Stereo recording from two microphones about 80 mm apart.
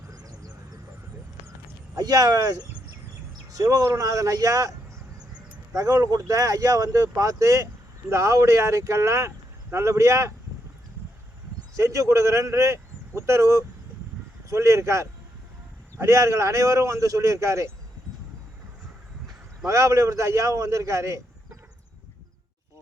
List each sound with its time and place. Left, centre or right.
0.1 s a sound: right
2.0 s speech: right
5.7 s a man's voice: right
11.8 s a man's voice: right
19.6 s a man's voice: right